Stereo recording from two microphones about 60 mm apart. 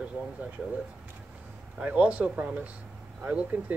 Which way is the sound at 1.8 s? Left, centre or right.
Centre.